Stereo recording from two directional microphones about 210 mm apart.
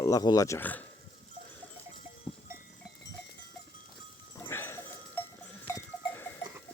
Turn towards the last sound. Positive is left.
turn(degrees=10)  # may be behind; listen again after turning